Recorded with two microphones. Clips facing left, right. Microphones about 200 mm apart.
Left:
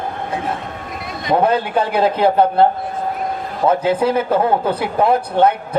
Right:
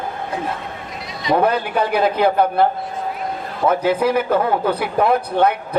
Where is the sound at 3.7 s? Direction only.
25° left (ahead or behind).